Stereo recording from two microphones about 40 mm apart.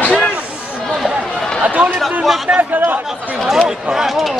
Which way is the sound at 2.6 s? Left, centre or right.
Right.